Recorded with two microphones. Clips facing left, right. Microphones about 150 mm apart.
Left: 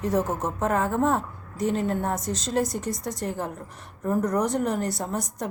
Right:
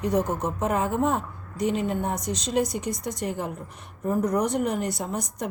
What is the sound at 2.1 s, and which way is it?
Speech, 5° left (ahead or behind).